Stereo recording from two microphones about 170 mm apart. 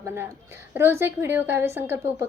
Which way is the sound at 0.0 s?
15° right (ahead or behind).